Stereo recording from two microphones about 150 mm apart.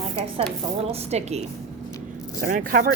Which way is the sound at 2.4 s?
70° right (ahead or behind).